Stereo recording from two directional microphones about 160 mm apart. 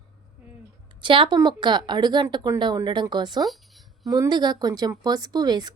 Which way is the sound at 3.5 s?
Centre (ahead or behind).